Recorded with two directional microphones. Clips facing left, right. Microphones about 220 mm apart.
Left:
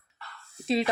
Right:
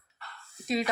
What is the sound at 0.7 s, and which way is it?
Speech, 30° left (ahead or behind).